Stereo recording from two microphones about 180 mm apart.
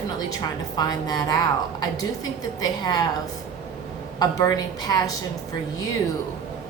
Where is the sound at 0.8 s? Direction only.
20° left (ahead or behind).